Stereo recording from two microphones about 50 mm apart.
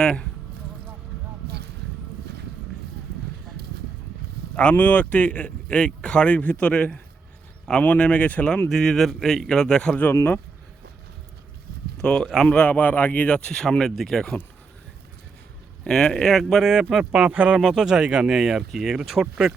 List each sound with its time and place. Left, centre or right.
0.0 s a sound: centre
4.8 s speech: left
8.7 s a man's voice: centre
9.9 s speech: left
11.9 s speech: centre
12.6 s speech: left
13.2 s a man's voice: centre
15.8 s a man's voice: centre
16.3 s speech: centre
17.0 s speech: right
17.6 s speech: centre